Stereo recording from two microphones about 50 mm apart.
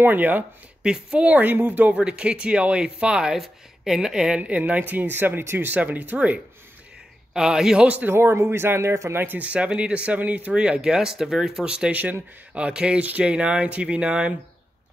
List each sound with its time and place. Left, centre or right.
0.0 s speech: right
0.8 s speech: right
1.4 s speech: right
2.0 s speech: right
3.3 s speech: centre
4.4 s speech: right
6.1 s speech: right
7.3 s speech: centre
8.1 s speech: right
9.1 s speech: right
9.5 s speech: right
11.9 s speech: right
12.5 s speech: right